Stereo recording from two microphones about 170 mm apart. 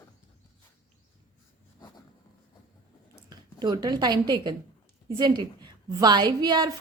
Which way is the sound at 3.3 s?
25° right (ahead or behind).